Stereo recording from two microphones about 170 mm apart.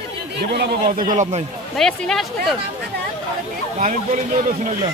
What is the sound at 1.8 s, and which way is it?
Speech, 5° left (ahead or behind).